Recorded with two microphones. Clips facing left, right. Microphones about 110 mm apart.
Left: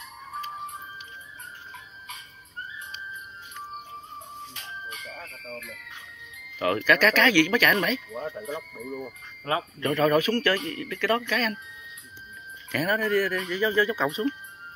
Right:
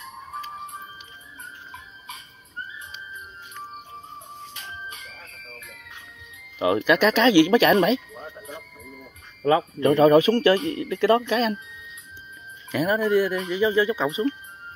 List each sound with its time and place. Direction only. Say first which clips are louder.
6.6 s speech: right 3 dB; 20° right (ahead or behind)
9.8 s speech: right 6 dB; 25° right (ahead or behind)
12.7 s speech: right 4 dB; 15° right (ahead or behind)